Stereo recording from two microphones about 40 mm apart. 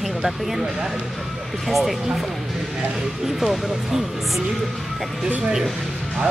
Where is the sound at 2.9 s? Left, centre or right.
Centre.